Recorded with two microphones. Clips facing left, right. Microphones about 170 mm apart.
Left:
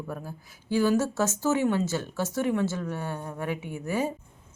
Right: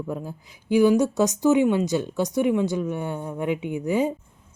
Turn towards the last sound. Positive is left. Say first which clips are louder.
# right 6 dB
turn(degrees=-20)  # may be behind; listen again after turning